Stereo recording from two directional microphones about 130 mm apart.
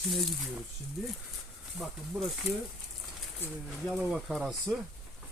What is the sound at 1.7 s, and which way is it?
Speech, centre (ahead or behind).